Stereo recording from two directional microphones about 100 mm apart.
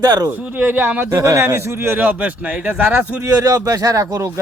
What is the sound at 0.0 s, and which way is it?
Speech, 45° right (ahead or behind).